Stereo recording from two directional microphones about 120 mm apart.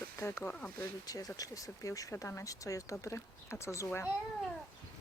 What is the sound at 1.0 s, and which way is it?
Speech, 30° left (ahead or behind).